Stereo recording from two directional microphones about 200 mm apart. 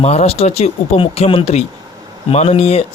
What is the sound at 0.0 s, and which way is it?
Speech, 30° left (ahead or behind).